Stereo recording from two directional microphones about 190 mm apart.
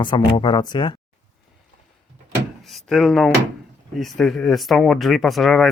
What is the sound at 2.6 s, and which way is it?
Speech, centre (ahead or behind).